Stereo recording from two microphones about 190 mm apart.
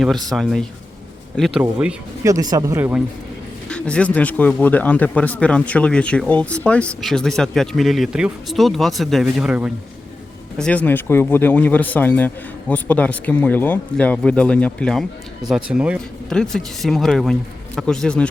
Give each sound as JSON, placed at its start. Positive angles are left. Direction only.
{"t": 0.3, "sound": "speech", "side_deg": 0}
{"t": 2.2, "sound": "speech", "side_deg": -20}
{"t": 3.7, "sound": "speech", "side_deg": 5}
{"t": 10.6, "sound": "a man's voice", "side_deg": 5}